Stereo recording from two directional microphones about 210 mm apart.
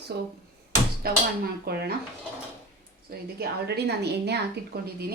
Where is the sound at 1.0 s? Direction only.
50° right (ahead or behind).